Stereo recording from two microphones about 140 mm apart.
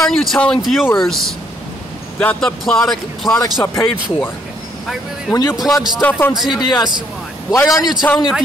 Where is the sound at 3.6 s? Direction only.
20° left (ahead or behind).